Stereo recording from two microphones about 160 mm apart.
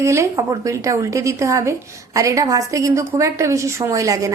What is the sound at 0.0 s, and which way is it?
A woman's voice, 20° right (ahead or behind).